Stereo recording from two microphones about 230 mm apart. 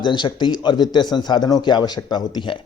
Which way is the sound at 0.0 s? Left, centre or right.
Centre.